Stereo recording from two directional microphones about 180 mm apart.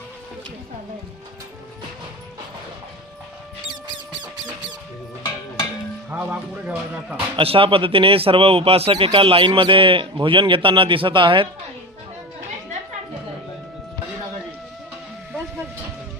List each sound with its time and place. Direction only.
6.1 s speech: 10° right (ahead or behind)
7.3 s speech: 30° right (ahead or behind)